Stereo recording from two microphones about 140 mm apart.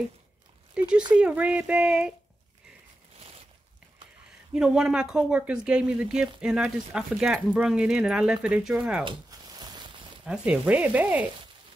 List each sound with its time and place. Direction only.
0.7 s speech: 5° right (ahead or behind)
4.6 s speech: 5° right (ahead or behind)
9.0 s zipper: 30° right (ahead or behind)
10.2 s speech: 5° right (ahead or behind)